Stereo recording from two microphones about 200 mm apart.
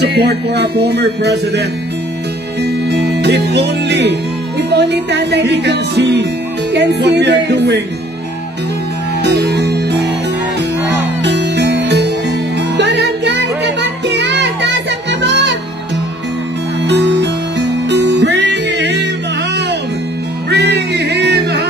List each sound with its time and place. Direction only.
0.0 s music: 55° right (ahead or behind)
9.2 s music: 60° right (ahead or behind)
16.8 s music: 60° right (ahead or behind)
20.4 s music: 55° right (ahead or behind)